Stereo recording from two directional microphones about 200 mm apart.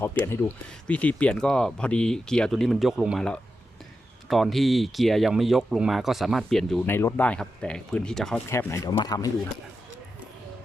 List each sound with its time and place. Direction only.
0.0 s speech: 10° left (ahead or behind)
8.4 s speech: 15° left (ahead or behind)